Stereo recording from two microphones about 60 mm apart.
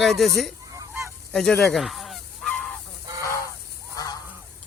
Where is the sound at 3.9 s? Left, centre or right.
Left.